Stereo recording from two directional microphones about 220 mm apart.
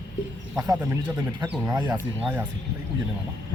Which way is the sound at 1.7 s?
20° right (ahead or behind).